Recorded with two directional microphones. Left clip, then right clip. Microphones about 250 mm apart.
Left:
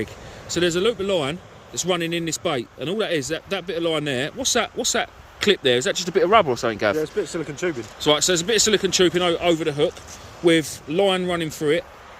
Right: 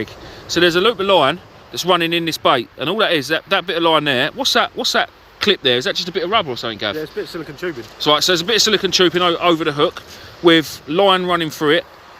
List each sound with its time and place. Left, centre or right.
0.5 s speech: centre
7.6 s speech: left
8.0 s speech: centre